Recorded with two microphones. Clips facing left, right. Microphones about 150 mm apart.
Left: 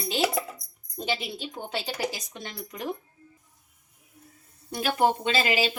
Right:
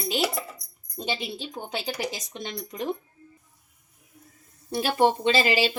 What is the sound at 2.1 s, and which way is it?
Speech, 20° right (ahead or behind).